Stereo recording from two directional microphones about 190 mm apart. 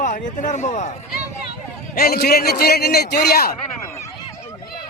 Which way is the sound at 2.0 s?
55° left (ahead or behind).